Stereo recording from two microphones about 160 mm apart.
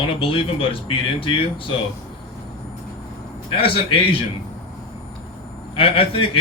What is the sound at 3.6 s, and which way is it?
Speech, 35° left (ahead or behind).